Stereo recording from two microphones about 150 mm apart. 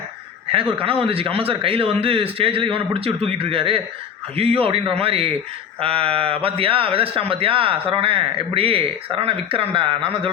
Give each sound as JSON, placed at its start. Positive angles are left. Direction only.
{"t": 0.7, "sound": "speech", "side_deg": -35}